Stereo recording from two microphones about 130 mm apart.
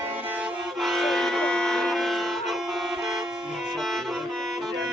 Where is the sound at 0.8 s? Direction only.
Centre (ahead or behind).